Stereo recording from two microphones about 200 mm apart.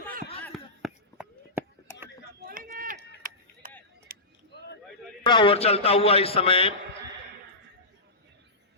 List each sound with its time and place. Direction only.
0.4 s a sound: 5° right (ahead or behind)
2.4 s run: 45° right (ahead or behind)
4.1 s keys jangling: 45° right (ahead or behind)
5.2 s a man's voice: 25° left (ahead or behind)